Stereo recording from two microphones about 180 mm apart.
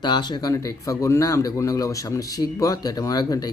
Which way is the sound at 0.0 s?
25° left (ahead or behind).